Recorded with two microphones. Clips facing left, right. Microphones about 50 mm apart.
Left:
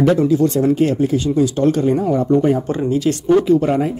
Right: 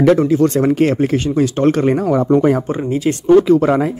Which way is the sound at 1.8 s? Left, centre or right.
Right.